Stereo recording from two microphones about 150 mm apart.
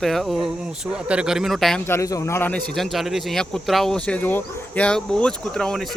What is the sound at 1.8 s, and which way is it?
Speech, 20° left (ahead or behind).